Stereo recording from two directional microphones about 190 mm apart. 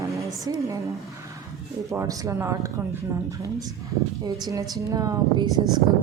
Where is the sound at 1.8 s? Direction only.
15° right (ahead or behind).